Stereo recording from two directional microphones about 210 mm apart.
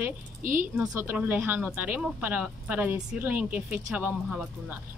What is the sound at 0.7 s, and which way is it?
Speech, 10° right (ahead or behind).